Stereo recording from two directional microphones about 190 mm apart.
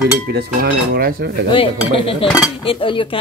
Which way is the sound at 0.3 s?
55° right (ahead or behind).